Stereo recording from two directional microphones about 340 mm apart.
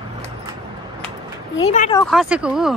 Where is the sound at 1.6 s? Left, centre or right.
Centre.